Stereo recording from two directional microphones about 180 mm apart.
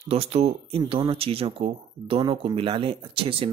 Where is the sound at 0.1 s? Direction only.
35° right (ahead or behind).